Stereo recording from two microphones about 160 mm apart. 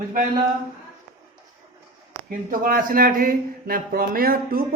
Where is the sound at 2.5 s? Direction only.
60° right (ahead or behind).